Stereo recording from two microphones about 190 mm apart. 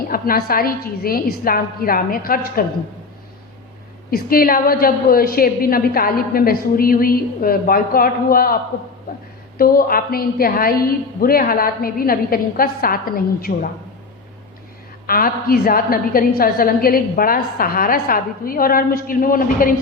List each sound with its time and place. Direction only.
0.1 s a woman's voice: 50° left (ahead or behind)
4.1 s a woman's voice: 50° left (ahead or behind)
15.0 s a woman's voice: 50° left (ahead or behind)